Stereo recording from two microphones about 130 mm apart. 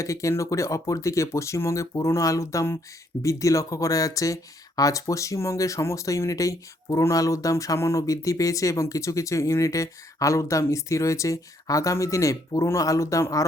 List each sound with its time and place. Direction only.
0.0 s speech: 25° left (ahead or behind)